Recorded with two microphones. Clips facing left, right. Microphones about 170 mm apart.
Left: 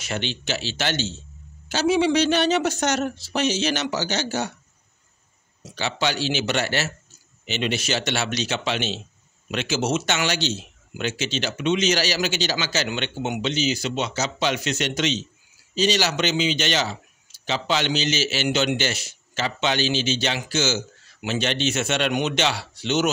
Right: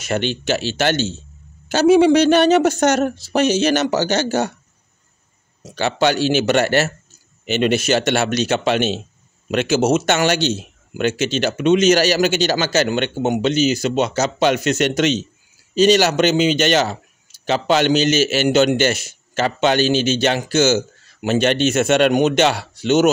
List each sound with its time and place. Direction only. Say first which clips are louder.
0.0 s speech: right 8 dB; 50° right (ahead or behind)
5.7 s speech: right 8 dB; 50° right (ahead or behind)